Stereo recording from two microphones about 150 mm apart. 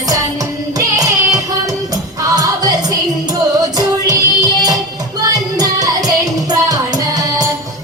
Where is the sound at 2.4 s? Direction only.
25° right (ahead or behind).